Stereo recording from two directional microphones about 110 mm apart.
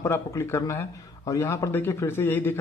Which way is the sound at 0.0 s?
25° left (ahead or behind).